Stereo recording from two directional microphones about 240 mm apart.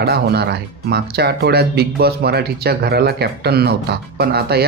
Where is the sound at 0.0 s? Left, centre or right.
Right.